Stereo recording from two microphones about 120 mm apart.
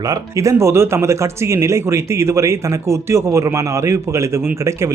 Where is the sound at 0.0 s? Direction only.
30° right (ahead or behind).